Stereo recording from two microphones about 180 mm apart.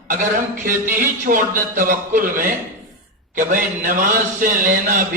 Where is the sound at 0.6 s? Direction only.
50° right (ahead or behind).